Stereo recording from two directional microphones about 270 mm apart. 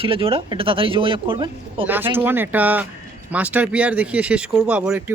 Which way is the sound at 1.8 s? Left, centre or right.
Centre.